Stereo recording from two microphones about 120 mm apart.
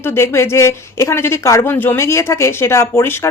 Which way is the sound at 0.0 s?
20° left (ahead or behind).